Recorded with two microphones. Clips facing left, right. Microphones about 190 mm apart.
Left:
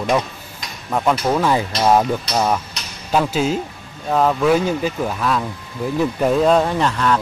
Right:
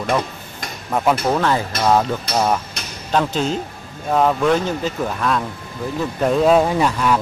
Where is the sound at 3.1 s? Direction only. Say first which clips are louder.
Left 1 dB; 5° left (ahead or behind).